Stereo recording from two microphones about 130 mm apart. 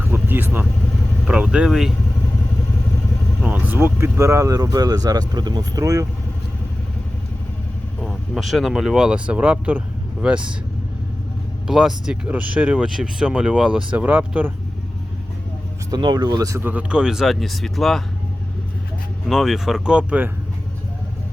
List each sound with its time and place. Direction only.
0.0 s vehicle: 15° right (ahead or behind)
1.3 s speech: 10° right (ahead or behind)
3.4 s speech: 15° right (ahead or behind)
8.0 s speech: centre (ahead or behind)
11.7 s speech: 5° right (ahead or behind)
15.9 s speech: 30° right (ahead or behind); by 18.0 s centre (ahead or behind)
19.3 s speech: 5° right (ahead or behind)